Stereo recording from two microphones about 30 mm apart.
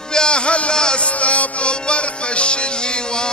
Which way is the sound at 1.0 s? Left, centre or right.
Left.